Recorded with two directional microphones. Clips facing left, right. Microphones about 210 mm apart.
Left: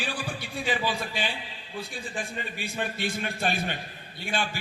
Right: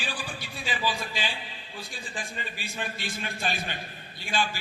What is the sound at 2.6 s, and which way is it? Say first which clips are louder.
A man's voice: left 6 dB; 55° left (ahead or behind).